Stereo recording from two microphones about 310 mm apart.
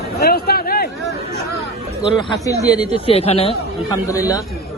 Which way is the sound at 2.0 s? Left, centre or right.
Centre.